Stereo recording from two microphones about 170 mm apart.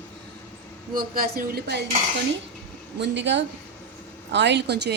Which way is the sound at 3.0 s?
90° right.